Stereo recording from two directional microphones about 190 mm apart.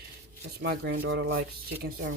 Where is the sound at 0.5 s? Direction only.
65° right (ahead or behind).